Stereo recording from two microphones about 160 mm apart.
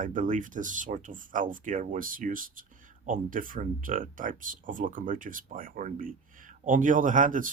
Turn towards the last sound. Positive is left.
turn(degrees=-55)  # may be behind; listen again after turning